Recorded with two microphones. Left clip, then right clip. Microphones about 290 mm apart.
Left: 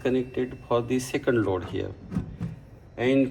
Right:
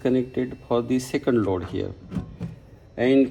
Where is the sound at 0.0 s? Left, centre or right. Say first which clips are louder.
Right 3 dB; right.